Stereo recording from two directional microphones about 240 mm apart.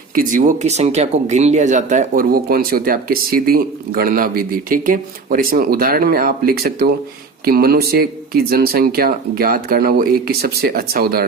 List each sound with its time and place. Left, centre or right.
0.1 s speech: right